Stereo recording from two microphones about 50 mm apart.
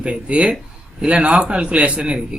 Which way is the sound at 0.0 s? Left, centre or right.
Right.